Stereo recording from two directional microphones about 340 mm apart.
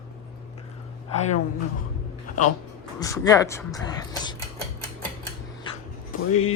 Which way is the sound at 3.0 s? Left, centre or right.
Centre.